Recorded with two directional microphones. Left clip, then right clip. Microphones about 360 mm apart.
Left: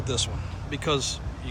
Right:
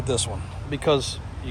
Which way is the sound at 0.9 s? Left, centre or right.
Centre.